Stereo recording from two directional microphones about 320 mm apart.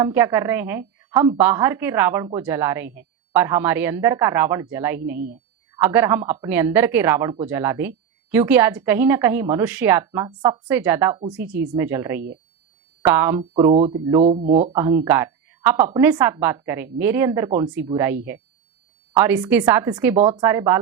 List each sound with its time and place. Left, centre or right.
0.0 s a woman's voice: centre
13.4 s a woman's voice: centre
15.0 s a woman's voice: centre